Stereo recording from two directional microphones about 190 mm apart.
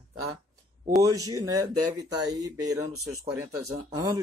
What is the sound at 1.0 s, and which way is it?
A man's voice, 20° right (ahead or behind).